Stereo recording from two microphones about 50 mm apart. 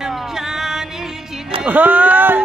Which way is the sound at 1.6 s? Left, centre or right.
Right.